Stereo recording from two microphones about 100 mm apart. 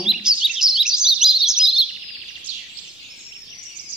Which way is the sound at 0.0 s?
5° right (ahead or behind).